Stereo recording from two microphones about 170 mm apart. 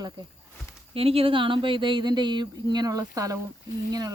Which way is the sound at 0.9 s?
35° right (ahead or behind).